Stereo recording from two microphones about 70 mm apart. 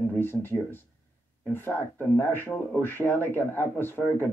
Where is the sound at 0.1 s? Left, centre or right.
Left.